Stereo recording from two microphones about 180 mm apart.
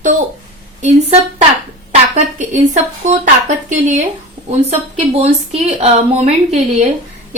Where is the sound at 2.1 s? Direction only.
40° right (ahead or behind).